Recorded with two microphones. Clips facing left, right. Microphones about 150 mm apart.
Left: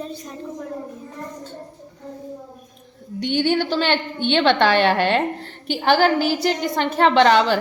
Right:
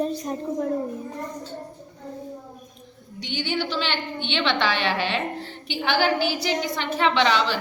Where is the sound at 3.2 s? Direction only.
55° left (ahead or behind).